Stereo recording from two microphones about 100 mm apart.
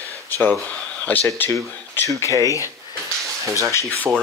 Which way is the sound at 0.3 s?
20° left (ahead or behind).